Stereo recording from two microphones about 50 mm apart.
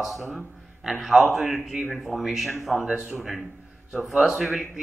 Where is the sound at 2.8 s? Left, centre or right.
Right.